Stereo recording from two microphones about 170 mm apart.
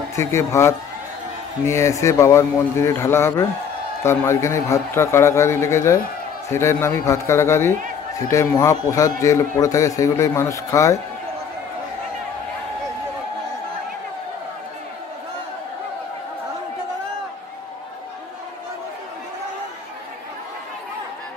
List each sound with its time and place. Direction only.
0.1 s a man's voice: 15° left (ahead or behind)